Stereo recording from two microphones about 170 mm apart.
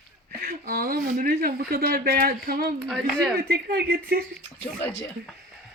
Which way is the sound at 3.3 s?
65° right (ahead or behind).